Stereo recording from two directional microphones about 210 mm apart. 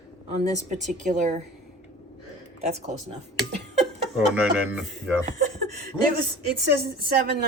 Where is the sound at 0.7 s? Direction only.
35° right (ahead or behind).